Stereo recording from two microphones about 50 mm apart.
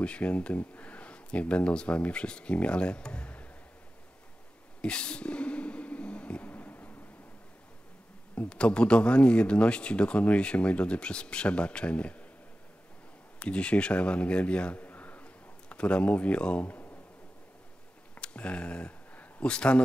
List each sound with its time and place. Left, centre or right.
0.0 s speech: left
4.8 s a sound: left
8.5 s speech: centre
13.4 s a man's voice: left
18.2 s a sound: left
19.4 s speech: left